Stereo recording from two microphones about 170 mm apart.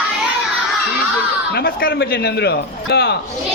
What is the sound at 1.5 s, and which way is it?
A man's voice, 70° left (ahead or behind).